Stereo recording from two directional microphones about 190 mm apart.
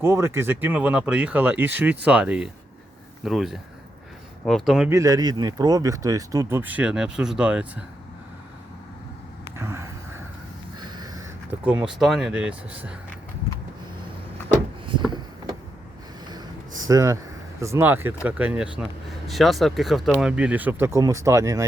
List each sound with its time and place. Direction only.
0.0 s speech: 15° right (ahead or behind)
4.9 s speech: 15° right (ahead or behind)
9.6 s vehicle: 15° right (ahead or behind)
10.8 s a sound: 20° right (ahead or behind)
11.6 s speech: 5° right (ahead or behind)
16.9 s speech: 20° right (ahead or behind)